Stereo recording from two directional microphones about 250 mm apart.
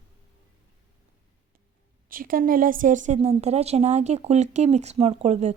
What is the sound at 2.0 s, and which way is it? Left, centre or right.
A woman's voice, right.